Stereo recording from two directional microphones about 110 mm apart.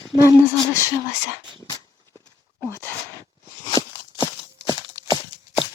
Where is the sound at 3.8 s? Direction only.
35° left (ahead or behind).